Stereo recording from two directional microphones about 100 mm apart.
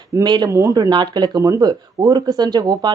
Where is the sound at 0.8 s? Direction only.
45° right (ahead or behind).